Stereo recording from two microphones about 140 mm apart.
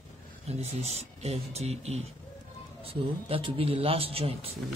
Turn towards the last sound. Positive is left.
turn(degrees=-45)  # may be behind; listen again after turning